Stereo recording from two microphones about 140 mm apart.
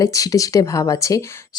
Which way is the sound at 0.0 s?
25° left (ahead or behind).